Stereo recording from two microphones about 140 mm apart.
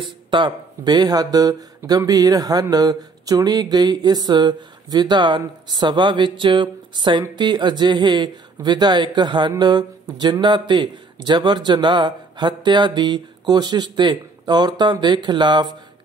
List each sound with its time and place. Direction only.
0.0 s speech: 35° right (ahead or behind)